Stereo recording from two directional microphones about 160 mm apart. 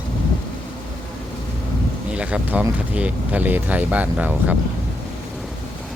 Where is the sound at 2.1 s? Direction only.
5° right (ahead or behind).